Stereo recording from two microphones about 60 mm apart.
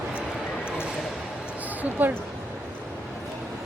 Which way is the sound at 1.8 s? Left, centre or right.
Right.